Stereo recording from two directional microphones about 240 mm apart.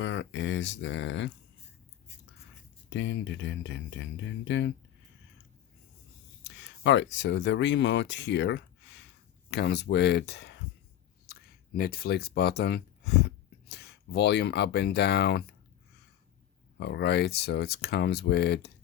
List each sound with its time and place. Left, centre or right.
0.0 s speech: left
2.9 s speech: left
6.4 s speech: left
16.7 s speech: left